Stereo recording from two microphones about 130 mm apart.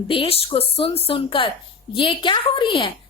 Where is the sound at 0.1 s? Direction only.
45° left (ahead or behind).